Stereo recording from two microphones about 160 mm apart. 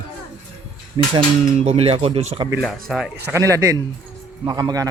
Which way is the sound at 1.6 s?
40° right (ahead or behind).